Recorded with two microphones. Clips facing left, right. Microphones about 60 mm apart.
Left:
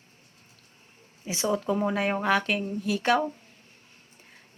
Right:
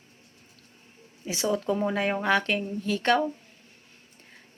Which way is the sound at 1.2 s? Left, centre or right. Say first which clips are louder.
Even; left.